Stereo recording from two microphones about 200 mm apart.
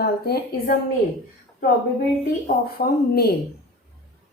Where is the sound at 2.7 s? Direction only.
50° left (ahead or behind).